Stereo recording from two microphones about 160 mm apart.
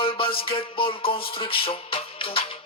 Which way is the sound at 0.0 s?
35° left (ahead or behind).